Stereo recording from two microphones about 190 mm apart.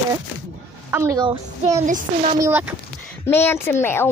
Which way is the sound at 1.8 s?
40° right (ahead or behind).